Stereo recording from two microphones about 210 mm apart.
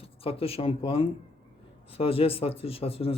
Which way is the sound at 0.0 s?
25° left (ahead or behind).